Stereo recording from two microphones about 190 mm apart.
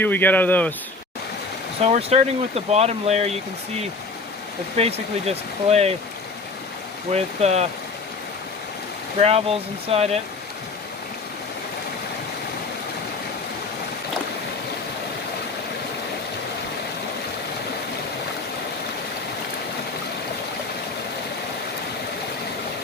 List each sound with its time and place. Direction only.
0.0 s speech: 10° left (ahead or behind)
1.8 s speech: 35° right (ahead or behind)
4.8 s speech: 35° right (ahead or behind)
7.1 s speech: 35° right (ahead or behind)
9.2 s speech: 35° right (ahead or behind)